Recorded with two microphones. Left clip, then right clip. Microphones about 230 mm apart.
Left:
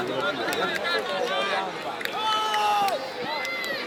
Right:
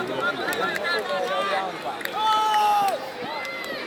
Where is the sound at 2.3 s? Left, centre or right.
Right.